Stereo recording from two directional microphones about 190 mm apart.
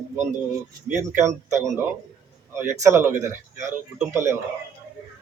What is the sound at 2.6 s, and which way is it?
Speech, 15° right (ahead or behind).